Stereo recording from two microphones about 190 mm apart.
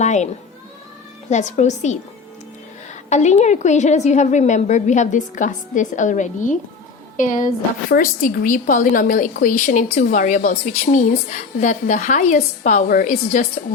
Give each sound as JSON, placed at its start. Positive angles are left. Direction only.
{"t": 0.0, "sound": "a child's voice", "side_deg": 40}
{"t": 1.3, "sound": "a woman's voice", "side_deg": 40}
{"t": 3.1, "sound": "a woman's voice", "side_deg": 35}